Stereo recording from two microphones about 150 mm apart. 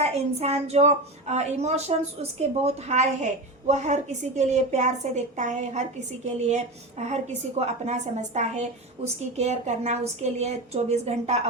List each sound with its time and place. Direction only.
0.0 s a woman's voice: 45° right (ahead or behind)